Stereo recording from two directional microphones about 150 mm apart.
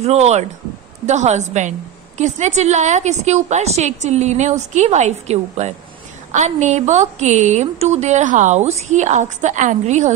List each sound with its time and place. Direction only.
0.0 s a woman's voice: 45° right (ahead or behind)